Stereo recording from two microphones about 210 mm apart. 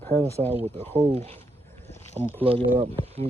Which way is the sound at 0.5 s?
30° right (ahead or behind).